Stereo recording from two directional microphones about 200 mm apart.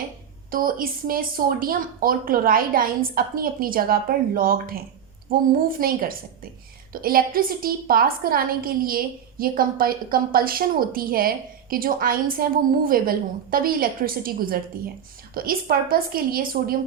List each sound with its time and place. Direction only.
0.5 s a woman's voice: 45° right (ahead or behind)